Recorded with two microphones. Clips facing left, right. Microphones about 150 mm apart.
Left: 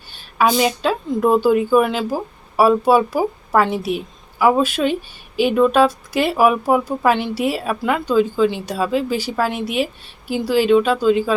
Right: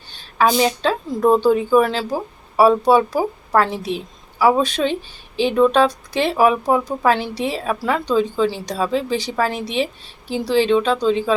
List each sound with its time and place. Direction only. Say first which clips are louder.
0.1 s speech: even; 10° left (ahead or behind)